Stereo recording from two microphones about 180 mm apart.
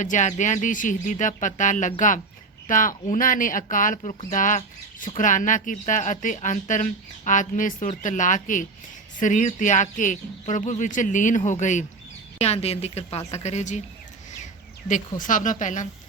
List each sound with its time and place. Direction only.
0.0 s a woman's voice: 45° left (ahead or behind)
15.2 s speech: 45° left (ahead or behind)